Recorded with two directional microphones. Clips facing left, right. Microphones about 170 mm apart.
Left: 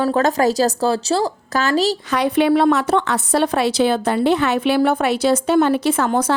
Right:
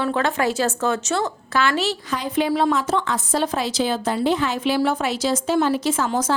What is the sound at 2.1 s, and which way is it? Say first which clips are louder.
A woman's voice: left 7 dB; 70° left (ahead or behind).